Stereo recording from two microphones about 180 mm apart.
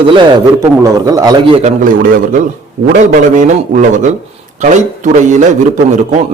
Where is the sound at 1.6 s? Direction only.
50° right (ahead or behind).